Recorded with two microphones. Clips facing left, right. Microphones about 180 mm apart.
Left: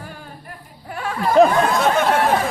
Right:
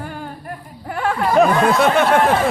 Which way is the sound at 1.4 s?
30° left (ahead or behind).